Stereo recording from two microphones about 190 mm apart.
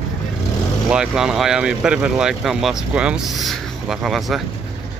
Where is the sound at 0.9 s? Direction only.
5° right (ahead or behind).